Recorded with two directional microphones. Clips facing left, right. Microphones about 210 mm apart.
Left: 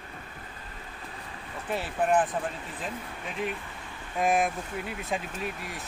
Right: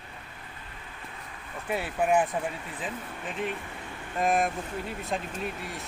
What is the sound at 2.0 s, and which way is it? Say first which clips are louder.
Speech: even; 10° right (ahead or behind).